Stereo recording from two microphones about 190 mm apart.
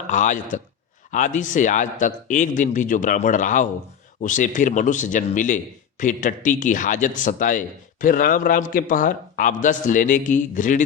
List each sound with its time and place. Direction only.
0.1 s speech: 40° left (ahead or behind)